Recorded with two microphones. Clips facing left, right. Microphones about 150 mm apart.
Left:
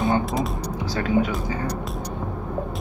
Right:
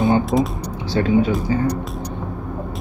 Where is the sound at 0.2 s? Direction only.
Centre (ahead or behind).